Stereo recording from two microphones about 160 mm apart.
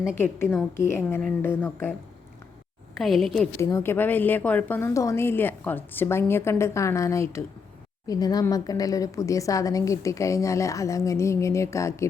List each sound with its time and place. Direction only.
0.2 s a woman's voice: 15° left (ahead or behind)
3.0 s a woman's voice: centre (ahead or behind)
3.6 s a woman's voice: 15° left (ahead or behind)